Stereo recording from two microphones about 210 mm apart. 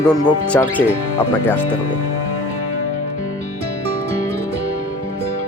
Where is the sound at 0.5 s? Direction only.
5° left (ahead or behind).